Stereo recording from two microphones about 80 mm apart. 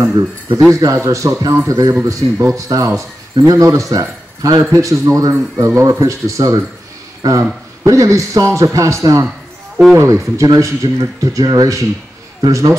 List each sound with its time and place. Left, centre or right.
0.0 s speech: right
5.3 s speech: right